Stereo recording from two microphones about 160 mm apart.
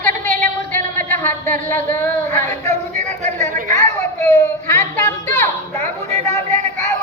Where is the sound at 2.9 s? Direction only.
50° right (ahead or behind).